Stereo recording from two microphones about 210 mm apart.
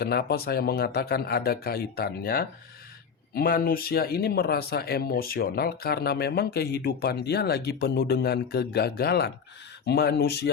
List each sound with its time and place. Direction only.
0.0 s speech: 50° left (ahead or behind)